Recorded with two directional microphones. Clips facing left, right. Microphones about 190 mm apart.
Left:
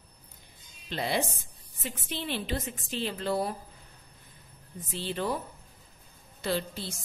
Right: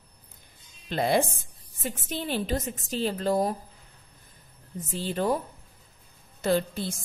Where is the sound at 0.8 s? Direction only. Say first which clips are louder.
Right 6 dB; 50° right (ahead or behind).